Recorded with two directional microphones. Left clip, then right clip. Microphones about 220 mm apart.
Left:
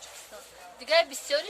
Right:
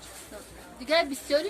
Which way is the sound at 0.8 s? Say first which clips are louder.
Left 1 dB; 40° left (ahead or behind).